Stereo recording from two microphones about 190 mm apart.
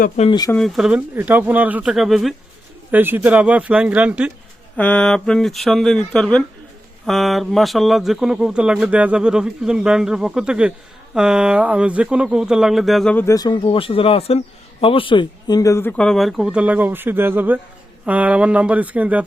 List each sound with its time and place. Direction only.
0.3 s speech: 20° left (ahead or behind)
0.5 s speech: centre (ahead or behind)
4.8 s speech: 5° left (ahead or behind)